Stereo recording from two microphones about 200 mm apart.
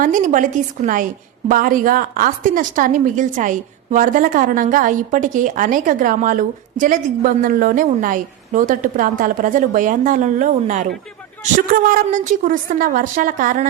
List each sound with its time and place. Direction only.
0.0 s a woman's voice: 40° right (ahead or behind)